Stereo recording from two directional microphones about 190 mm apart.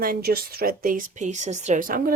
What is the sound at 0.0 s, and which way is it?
Speech, 50° right (ahead or behind).